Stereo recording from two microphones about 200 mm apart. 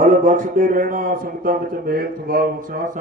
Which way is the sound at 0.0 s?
40° right (ahead or behind).